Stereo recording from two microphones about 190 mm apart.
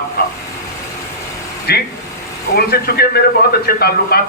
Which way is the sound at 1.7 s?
55° left (ahead or behind).